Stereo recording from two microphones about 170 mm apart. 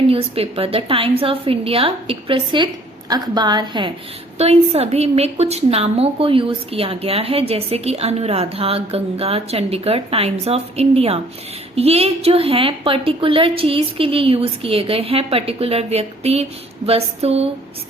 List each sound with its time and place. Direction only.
0.1 s a woman's voice: 35° right (ahead or behind)
4.4 s a woman's voice: 40° right (ahead or behind)